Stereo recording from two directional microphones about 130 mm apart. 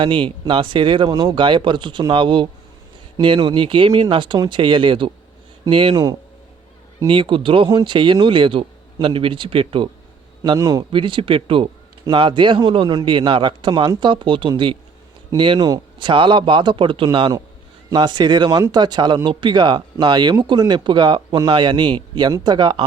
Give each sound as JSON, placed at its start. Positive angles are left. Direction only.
{"t": 0.0, "sound": "a man's voice", "side_deg": -40}